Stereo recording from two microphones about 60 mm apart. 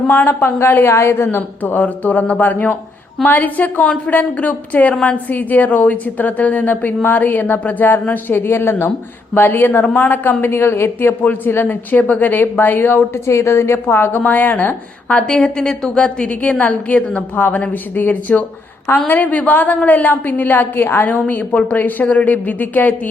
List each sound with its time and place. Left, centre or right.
0.1 s a woman's voice: left
13.2 s speech: left
15.3 s a woman's voice: centre; by 23.0 s left